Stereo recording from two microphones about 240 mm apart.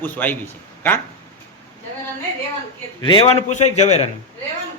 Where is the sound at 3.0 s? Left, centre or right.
Left.